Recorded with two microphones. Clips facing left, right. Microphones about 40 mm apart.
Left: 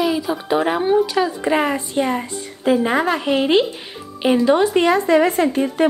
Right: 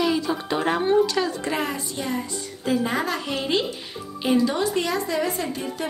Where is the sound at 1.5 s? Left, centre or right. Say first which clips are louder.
Left 9 dB; left.